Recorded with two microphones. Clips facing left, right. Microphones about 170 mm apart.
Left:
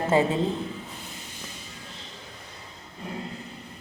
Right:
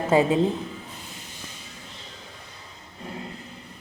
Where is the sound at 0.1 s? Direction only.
15° right (ahead or behind).